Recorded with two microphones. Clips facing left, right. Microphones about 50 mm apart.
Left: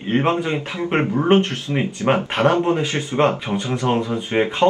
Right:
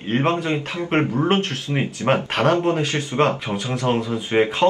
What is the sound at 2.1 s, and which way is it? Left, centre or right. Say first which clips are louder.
Speech: left 1 dB; centre.